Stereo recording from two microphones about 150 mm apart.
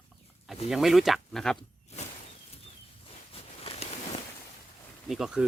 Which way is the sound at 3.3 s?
40° left (ahead or behind).